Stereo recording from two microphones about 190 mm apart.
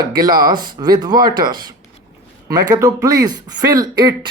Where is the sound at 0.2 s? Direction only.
20° right (ahead or behind).